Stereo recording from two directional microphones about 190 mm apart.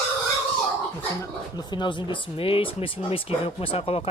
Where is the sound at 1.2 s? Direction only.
20° left (ahead or behind).